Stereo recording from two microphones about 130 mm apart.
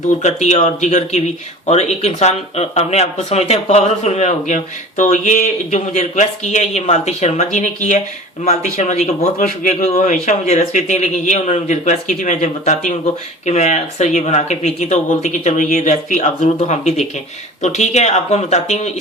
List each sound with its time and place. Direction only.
0.2 s speech: 60° left (ahead or behind)
7.5 s a man's voice: 75° left (ahead or behind)